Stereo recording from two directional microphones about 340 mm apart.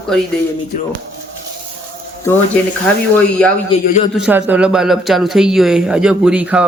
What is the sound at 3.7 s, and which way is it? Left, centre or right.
Speech, centre.